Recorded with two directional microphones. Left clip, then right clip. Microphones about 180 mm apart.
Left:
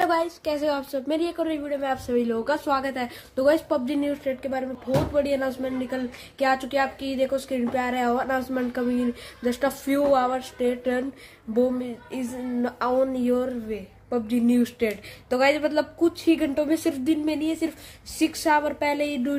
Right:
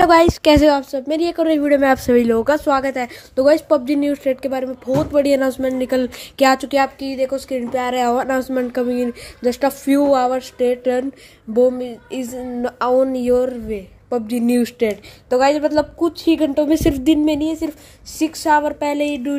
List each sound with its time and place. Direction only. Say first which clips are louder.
0.0 s speech: right 12 dB; 45° right (ahead or behind)
0.7 s a woman's voice: right 7 dB; 25° right (ahead or behind)
1.6 s a woman's voice: right 13 dB; 50° right (ahead or behind)
6.6 s a woman's voice: right 7 dB; 30° right (ahead or behind)
7.1 s a woman's voice: right 4 dB; 15° right (ahead or behind); by 14.9 s 35° right (ahead or behind)
15.2 s a woman's voice: right 6 dB; 20° right (ahead or behind)
18.2 s speech: right 6 dB; 10° right (ahead or behind)